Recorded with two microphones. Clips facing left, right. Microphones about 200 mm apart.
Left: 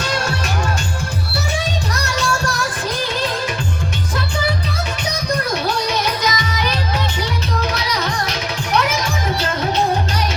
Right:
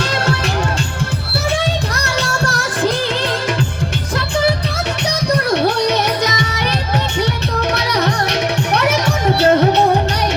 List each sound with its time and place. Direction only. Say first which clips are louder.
5.5 s music: right 6 dB; 70° right (ahead or behind)
7.7 s music: right 5 dB; 70° right (ahead or behind)